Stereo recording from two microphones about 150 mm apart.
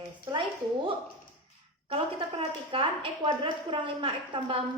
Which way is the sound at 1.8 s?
40° right (ahead or behind).